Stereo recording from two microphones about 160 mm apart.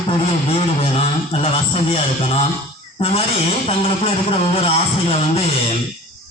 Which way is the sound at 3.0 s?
40° left (ahead or behind).